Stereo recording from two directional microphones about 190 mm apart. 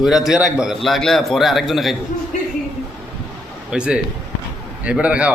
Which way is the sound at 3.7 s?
5° right (ahead or behind).